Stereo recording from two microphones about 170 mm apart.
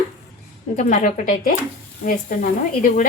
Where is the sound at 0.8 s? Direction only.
45° left (ahead or behind).